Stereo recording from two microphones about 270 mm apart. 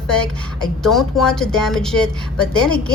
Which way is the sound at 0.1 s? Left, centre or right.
Centre.